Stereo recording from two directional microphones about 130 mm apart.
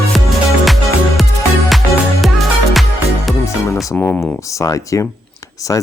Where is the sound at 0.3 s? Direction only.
Centre (ahead or behind).